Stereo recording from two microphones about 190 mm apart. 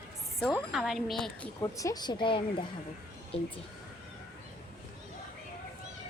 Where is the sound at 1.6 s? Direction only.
15° left (ahead or behind).